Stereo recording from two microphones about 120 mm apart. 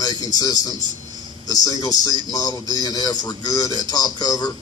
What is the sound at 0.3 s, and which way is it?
A man's voice, 35° left (ahead or behind).